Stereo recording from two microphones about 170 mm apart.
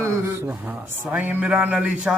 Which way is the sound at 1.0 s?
10° right (ahead or behind).